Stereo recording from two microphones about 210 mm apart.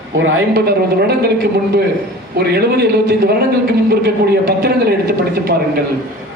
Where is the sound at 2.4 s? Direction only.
50° right (ahead or behind).